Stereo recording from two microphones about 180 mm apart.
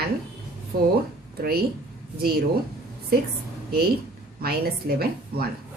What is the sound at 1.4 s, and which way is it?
Speech, 60° right (ahead or behind).